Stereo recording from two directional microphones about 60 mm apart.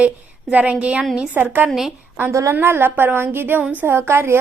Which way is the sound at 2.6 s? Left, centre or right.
Right.